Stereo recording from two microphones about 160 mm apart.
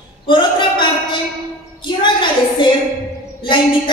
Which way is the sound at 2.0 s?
30° left (ahead or behind).